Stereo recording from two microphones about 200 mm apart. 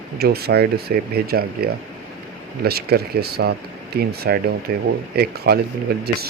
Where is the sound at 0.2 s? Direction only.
50° right (ahead or behind).